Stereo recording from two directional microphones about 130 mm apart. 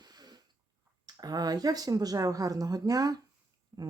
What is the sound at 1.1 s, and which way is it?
Speech, 30° right (ahead or behind).